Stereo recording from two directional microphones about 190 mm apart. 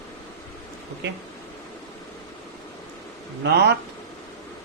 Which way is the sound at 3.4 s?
60° right (ahead or behind).